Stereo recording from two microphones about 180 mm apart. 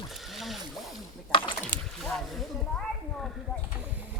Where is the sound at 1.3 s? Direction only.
30° left (ahead or behind).